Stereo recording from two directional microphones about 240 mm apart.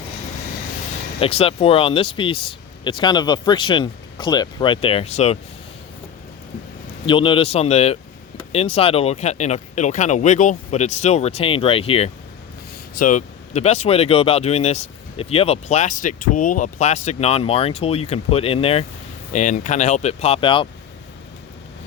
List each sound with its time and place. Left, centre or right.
1.2 s speech: left
7.0 s speech: left
12.9 s speech: left